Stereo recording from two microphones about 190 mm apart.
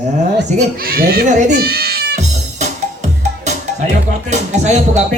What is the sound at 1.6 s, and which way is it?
Music, 55° right (ahead or behind).